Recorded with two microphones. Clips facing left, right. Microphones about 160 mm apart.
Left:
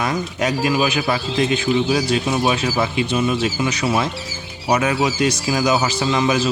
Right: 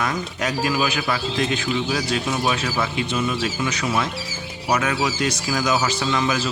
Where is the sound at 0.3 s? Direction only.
20° left (ahead or behind).